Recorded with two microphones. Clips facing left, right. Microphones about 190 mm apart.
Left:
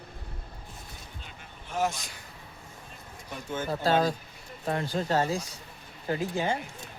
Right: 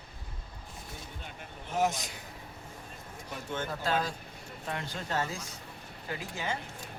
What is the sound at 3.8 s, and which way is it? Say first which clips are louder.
Speech: left 9 dB; 35° left (ahead or behind).